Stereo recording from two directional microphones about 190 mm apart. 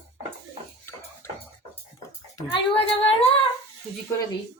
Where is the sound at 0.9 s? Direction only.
15° left (ahead or behind).